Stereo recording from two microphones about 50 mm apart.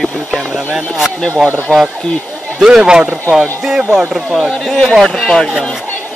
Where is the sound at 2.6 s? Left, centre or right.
Centre.